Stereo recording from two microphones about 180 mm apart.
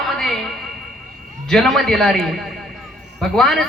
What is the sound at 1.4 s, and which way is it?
A man's voice, centre (ahead or behind).